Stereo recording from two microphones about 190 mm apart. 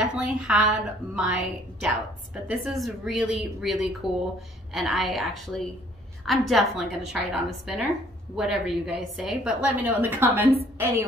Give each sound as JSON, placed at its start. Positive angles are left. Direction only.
{"t": 0.0, "sound": "a woman's voice", "side_deg": -5}